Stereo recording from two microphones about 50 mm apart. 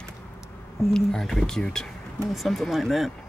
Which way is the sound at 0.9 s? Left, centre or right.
Centre.